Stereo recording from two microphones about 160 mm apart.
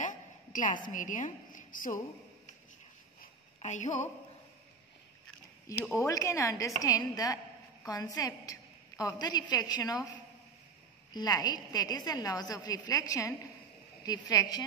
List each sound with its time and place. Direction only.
0.0 s a woman's voice: 55° left (ahead or behind)
3.2 s a sound: 50° left (ahead or behind)
5.9 s a woman's voice: 20° left (ahead or behind)
11.1 s a woman's voice: 25° left (ahead or behind)
14.0 s a woman's voice: 25° left (ahead or behind)